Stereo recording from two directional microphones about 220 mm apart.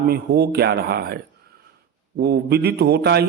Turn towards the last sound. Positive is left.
turn(degrees=-45)  # may be behind; listen again after turning